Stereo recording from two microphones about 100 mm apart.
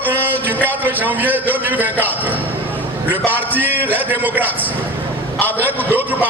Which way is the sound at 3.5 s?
20° right (ahead or behind).